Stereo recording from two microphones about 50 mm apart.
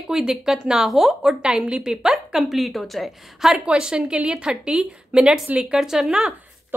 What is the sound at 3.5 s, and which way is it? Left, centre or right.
A woman's voice, centre.